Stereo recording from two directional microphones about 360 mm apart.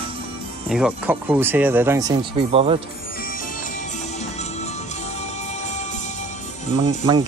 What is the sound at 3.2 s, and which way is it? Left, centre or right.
Music, left.